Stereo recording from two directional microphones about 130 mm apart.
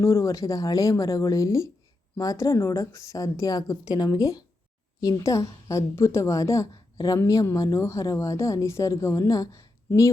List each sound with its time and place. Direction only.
0.0 s a woman's voice: 25° left (ahead or behind)